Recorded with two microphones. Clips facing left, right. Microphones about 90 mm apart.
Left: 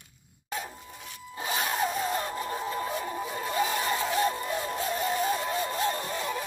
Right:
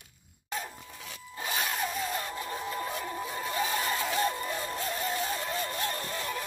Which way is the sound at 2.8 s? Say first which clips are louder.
Left 3 dB; 10° left (ahead or behind).